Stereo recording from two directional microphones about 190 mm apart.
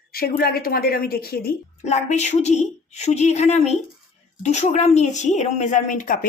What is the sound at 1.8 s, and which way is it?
A woman's voice, 35° left (ahead or behind).